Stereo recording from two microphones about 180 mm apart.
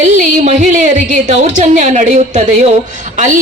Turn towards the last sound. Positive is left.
turn(degrees=-45)  # may be behind; listen again after turning